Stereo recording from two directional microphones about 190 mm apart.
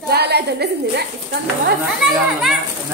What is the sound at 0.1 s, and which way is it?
Speech, 60° right (ahead or behind).